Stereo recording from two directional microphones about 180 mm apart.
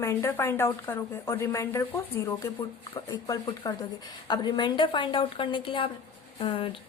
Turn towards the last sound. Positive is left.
turn(degrees=30)  # may be behind; listen again after turning